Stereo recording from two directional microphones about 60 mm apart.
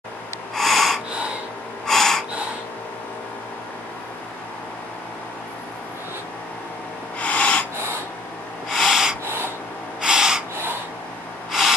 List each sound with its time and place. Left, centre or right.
0.6 s snort: centre
1.9 s gasp: centre
7.2 s snort: left
8.6 s snort: centre
10.0 s gasp: centre